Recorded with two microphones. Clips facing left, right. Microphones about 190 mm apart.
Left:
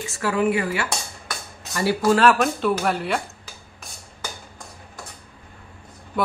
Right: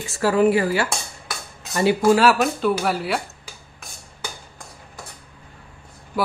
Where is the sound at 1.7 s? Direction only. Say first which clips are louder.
Right 4 dB; 20° right (ahead or behind).